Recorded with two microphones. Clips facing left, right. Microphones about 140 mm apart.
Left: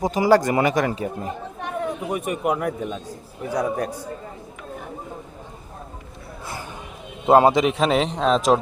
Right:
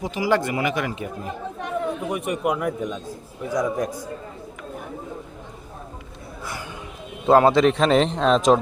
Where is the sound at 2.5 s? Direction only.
45° left (ahead or behind).